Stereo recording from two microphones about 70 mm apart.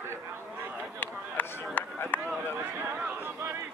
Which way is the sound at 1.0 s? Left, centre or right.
Left.